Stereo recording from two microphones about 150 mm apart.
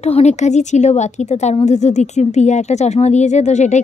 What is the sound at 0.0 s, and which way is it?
Speech, 45° left (ahead or behind).